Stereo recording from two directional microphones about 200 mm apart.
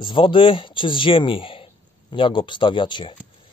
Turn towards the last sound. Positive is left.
turn(degrees=25)  # may be behind; listen again after turning